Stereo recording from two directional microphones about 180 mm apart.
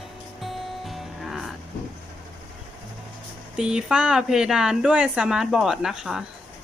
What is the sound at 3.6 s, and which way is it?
Speech, 5° right (ahead or behind).